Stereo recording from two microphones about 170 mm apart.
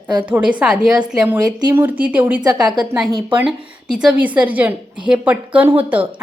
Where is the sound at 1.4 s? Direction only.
25° right (ahead or behind).